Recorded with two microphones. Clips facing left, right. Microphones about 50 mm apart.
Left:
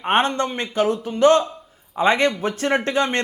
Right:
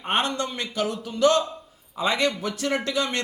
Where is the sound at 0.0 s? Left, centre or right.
Left.